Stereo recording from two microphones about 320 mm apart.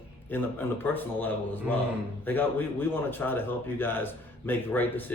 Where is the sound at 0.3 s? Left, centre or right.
Centre.